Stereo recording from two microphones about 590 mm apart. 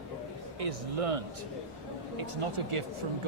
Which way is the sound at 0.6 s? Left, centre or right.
Right.